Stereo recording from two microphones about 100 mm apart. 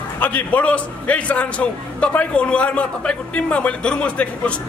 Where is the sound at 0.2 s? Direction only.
15° left (ahead or behind).